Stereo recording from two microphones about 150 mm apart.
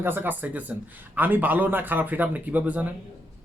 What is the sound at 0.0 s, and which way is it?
Speech, 15° right (ahead or behind).